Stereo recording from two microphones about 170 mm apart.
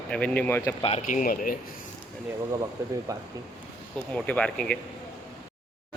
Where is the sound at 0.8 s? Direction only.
40° left (ahead or behind); by 1.6 s 55° left (ahead or behind).